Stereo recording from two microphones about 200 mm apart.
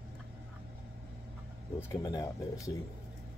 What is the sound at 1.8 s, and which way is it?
Speech, 15° left (ahead or behind).